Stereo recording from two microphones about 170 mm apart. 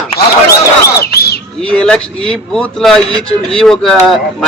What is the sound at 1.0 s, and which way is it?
Bird, 70° left (ahead or behind).